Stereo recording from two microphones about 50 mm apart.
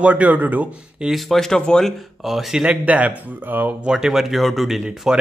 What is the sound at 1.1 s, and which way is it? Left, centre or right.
Speech, centre.